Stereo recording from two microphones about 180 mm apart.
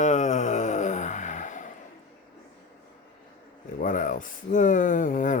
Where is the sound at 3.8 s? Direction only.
45° left (ahead or behind).